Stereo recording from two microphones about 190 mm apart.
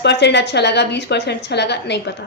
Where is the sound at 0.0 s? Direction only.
65° left (ahead or behind).